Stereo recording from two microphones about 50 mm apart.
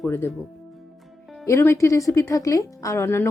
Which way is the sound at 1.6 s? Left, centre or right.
Left.